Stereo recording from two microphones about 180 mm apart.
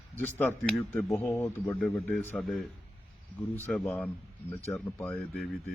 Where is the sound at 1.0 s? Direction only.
15° left (ahead or behind).